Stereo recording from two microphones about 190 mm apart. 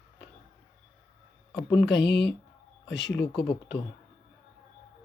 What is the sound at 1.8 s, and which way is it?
Speech, 70° left (ahead or behind).